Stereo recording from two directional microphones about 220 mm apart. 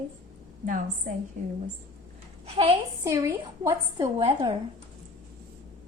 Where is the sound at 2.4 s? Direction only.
25° right (ahead or behind).